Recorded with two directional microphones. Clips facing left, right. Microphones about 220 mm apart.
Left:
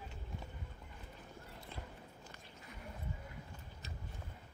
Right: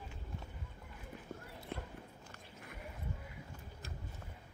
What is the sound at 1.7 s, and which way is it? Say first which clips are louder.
Walk: right 7 dB; 60° right (ahead or behind).